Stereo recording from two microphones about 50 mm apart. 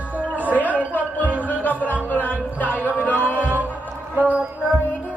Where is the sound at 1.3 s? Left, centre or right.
Right.